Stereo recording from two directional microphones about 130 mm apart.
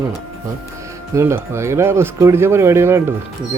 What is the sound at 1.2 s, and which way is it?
A man's voice, 20° right (ahead or behind).